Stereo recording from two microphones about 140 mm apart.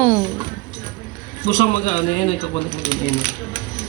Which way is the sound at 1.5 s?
50° left (ahead or behind).